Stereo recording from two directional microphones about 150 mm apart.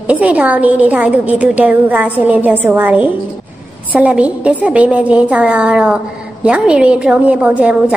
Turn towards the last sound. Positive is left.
turn(degrees=-10)  # may be behind; listen again after turning